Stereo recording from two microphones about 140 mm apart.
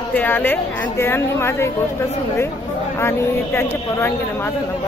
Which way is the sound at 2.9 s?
15° left (ahead or behind).